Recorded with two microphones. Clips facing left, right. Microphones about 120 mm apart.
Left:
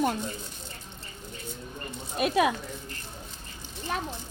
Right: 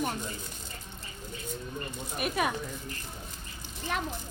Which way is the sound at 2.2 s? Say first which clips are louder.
Left 6 dB; 90° left.